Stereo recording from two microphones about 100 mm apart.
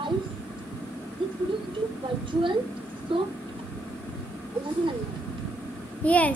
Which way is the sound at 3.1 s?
60° right (ahead or behind).